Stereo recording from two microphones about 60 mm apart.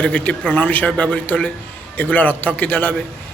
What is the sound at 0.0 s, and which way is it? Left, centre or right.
A man's voice, left.